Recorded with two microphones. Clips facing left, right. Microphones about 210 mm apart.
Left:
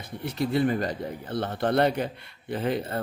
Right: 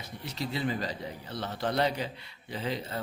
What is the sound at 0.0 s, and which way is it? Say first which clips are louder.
Speech: left 8 dB; 55° left (ahead or behind).